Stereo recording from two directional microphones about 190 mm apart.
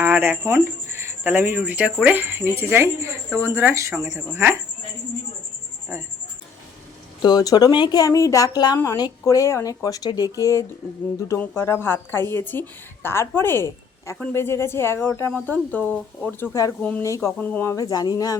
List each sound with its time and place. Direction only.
0.0 s speech: 10° right (ahead or behind)
7.2 s speech: 20° left (ahead or behind)